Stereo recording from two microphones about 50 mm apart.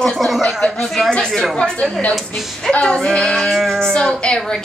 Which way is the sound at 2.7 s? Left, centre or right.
Centre.